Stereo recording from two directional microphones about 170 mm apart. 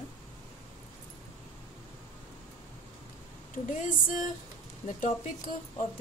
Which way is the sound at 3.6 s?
50° left (ahead or behind).